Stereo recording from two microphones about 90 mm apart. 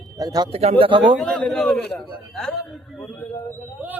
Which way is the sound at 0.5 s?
80° right.